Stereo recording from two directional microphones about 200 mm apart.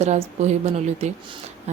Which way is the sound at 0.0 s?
35° right (ahead or behind).